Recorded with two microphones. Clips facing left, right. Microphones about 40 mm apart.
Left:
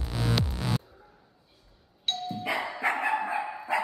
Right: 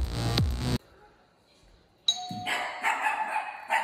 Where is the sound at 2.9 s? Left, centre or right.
Centre.